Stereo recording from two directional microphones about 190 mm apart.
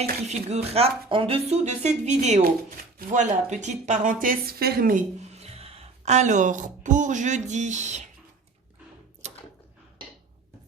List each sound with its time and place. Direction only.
0.3 s speech: 35° right (ahead or behind); by 5.0 s 50° right (ahead or behind)
5.2 s speech: 35° right (ahead or behind)
9.2 s a sound: 35° right (ahead or behind)